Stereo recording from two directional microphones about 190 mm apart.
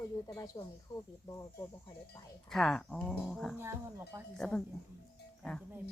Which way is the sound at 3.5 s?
10° right (ahead or behind).